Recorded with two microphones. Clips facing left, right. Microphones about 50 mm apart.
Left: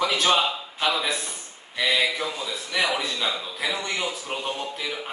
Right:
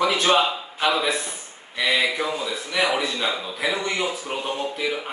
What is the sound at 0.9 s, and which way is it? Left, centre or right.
A man's voice, centre.